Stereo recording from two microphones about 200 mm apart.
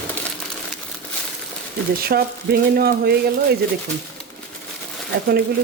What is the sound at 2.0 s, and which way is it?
Speech, 50° right (ahead or behind).